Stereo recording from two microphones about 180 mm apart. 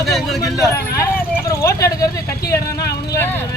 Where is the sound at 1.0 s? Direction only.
15° left (ahead or behind).